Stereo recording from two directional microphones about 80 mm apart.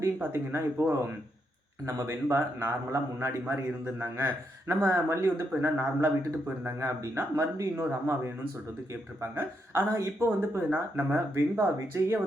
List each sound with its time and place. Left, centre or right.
0.0 s a man's voice: right
9.3 s a man's voice: right
9.9 s speech: right